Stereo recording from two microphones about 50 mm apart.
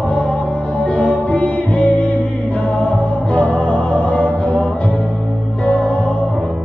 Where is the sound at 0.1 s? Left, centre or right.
Left.